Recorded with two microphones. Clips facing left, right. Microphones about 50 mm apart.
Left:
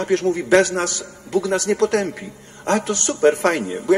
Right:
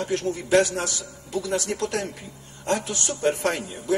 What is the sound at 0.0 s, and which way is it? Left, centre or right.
A man's voice, left.